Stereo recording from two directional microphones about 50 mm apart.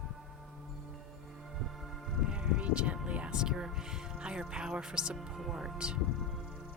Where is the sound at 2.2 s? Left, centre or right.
Centre.